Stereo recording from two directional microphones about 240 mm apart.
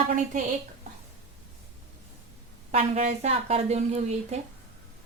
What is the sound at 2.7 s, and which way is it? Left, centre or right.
A woman's voice, right.